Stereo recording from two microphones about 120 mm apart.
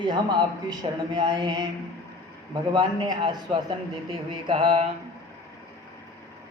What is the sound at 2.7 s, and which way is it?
A man's voice, 40° right (ahead or behind).